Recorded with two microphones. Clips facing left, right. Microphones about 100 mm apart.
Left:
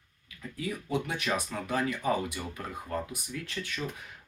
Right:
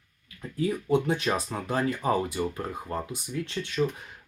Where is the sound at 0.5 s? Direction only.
30° right (ahead or behind).